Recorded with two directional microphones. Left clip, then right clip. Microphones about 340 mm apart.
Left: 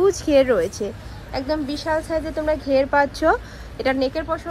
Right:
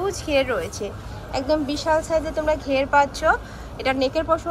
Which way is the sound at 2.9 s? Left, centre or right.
Centre.